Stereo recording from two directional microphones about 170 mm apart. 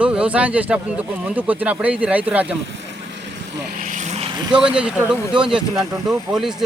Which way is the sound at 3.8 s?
45° right (ahead or behind).